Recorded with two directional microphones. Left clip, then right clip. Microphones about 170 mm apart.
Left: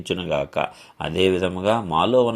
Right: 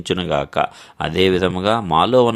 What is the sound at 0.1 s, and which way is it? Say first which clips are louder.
Speech: right 4 dB; 30° right (ahead or behind).